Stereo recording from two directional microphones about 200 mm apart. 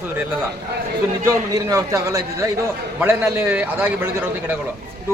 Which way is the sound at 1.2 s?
15° right (ahead or behind).